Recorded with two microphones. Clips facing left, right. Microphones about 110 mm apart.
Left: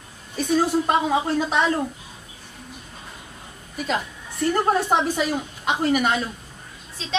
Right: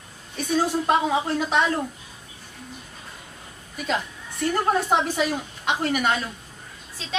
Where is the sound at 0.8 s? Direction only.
Centre (ahead or behind).